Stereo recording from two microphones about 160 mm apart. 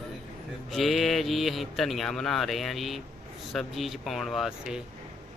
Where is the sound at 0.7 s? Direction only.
Centre (ahead or behind).